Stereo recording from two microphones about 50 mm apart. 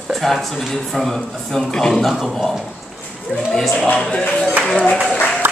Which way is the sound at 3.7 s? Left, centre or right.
Left.